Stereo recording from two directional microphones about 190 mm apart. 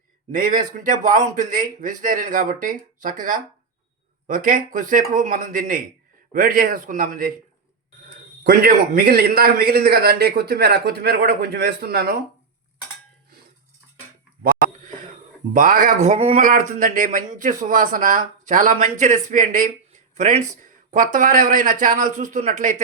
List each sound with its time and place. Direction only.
0.3 s speech: 45° right (ahead or behind)
8.4 s a man's voice: 50° right (ahead or behind)
15.5 s speech: 45° right (ahead or behind)